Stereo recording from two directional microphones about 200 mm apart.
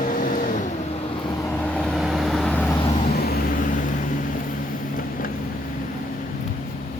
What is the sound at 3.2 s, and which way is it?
Vehicle, 50° left (ahead or behind).